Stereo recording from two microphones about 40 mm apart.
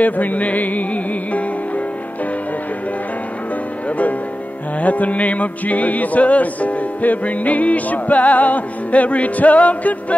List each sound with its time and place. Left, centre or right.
0.0 s music: left
4.7 s music: left